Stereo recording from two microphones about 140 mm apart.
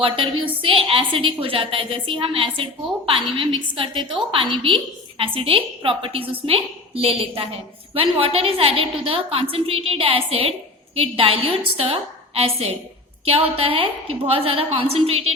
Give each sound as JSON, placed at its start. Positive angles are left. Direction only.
{"t": 0.0, "sound": "a woman's voice", "side_deg": -40}